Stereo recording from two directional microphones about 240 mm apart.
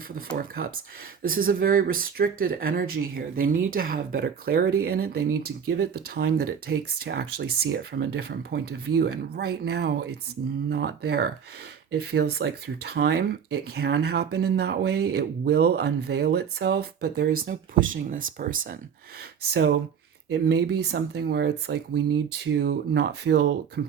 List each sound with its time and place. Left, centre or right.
0.3 s speech: right
20.3 s speech: right